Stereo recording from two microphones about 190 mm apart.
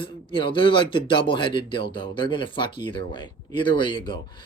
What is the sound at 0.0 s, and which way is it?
A man's voice, 25° left (ahead or behind).